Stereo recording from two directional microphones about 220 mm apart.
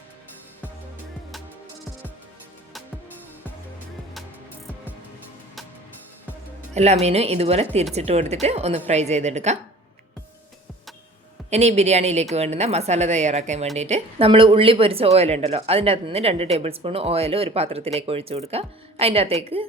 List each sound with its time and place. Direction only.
6.7 s speech: 30° right (ahead or behind)
11.5 s speech: 30° right (ahead or behind)